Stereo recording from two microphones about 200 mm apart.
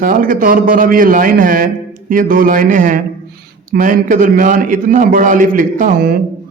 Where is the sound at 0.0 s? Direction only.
45° right (ahead or behind).